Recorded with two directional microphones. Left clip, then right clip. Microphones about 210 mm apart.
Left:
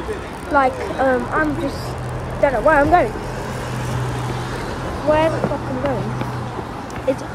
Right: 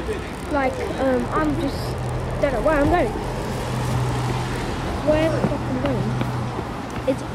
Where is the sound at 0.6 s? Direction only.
Centre (ahead or behind).